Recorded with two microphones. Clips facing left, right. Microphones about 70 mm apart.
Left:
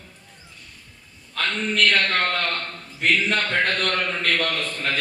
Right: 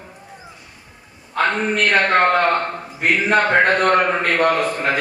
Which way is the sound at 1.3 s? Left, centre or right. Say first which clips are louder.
Right 6 dB; right.